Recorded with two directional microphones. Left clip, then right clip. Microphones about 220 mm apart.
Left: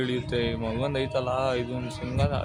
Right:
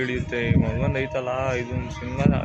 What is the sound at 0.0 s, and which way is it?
Speech, 10° left (ahead or behind).